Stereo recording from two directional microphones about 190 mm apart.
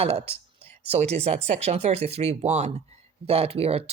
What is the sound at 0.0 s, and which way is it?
Speech, 30° right (ahead or behind).